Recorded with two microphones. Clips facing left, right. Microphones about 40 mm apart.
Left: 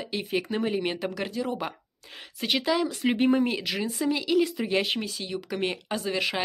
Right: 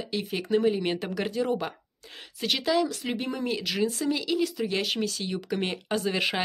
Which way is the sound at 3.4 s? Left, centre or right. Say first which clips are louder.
Right 1 dB; centre.